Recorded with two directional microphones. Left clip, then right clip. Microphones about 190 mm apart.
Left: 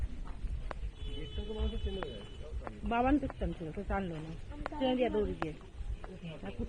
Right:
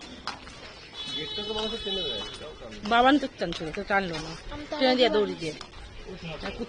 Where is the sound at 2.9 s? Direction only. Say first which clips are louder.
Right 10 dB; 25° right (ahead or behind).